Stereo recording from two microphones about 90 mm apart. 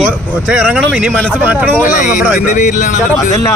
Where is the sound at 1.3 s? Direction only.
20° right (ahead or behind).